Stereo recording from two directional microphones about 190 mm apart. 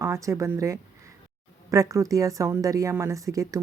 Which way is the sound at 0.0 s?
15° right (ahead or behind).